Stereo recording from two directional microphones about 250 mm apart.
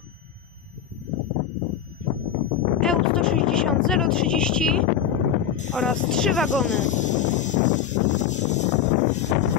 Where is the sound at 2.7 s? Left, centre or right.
Centre.